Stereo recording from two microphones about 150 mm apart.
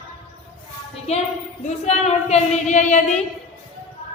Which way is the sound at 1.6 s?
45° left (ahead or behind).